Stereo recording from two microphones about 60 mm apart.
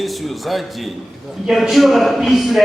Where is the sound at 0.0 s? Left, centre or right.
Centre.